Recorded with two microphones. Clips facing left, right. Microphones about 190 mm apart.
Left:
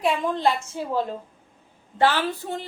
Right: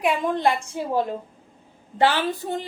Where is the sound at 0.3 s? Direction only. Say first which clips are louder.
Right 1 dB; 15° right (ahead or behind).